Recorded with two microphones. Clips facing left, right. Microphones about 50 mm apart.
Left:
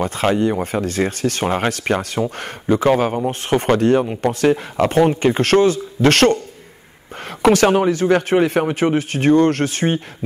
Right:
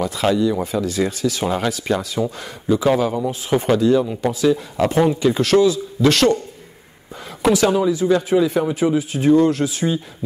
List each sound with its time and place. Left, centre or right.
0.0 s speech: left
7.6 s speech: left